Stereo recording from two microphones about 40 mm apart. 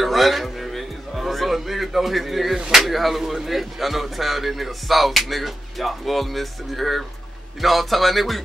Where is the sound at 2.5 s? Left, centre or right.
Centre.